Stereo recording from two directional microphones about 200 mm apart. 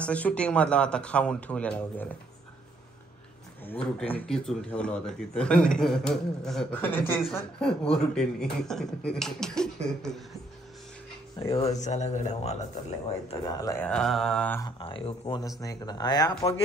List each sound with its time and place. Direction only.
0.0 s a man's voice: 5° left (ahead or behind)
3.6 s a man's voice: 5° left (ahead or behind)
11.3 s speech: 30° left (ahead or behind)
13.3 s speech: 20° left (ahead or behind)
13.8 s a man's voice: 5° left (ahead or behind)
14.6 s speech: 25° left (ahead or behind)